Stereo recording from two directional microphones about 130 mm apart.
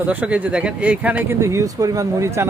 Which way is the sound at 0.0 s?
10° right (ahead or behind).